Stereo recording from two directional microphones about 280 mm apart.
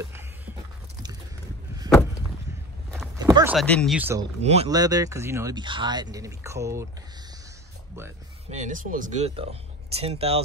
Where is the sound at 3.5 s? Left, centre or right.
Centre.